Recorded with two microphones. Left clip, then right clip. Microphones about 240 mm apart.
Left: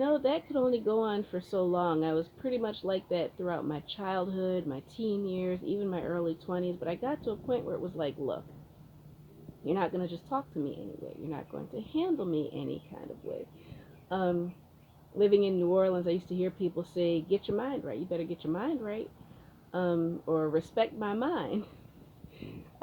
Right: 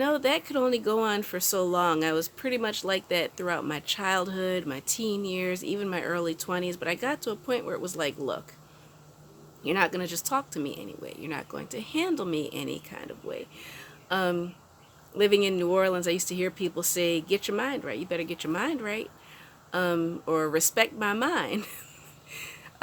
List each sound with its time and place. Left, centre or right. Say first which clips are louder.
0.0 s speech: right 3 dB; right
9.6 s speech: right 5 dB; right
14.1 s speech: right 4 dB; right